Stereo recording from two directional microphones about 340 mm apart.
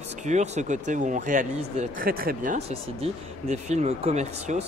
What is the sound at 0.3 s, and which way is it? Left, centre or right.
Speech, right.